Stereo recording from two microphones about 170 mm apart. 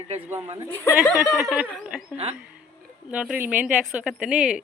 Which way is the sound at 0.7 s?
10° left (ahead or behind).